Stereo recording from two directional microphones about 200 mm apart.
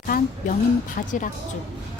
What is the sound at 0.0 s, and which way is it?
A woman's voice, 40° left (ahead or behind).